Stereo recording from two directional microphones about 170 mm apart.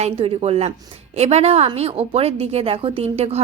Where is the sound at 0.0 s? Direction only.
35° right (ahead or behind).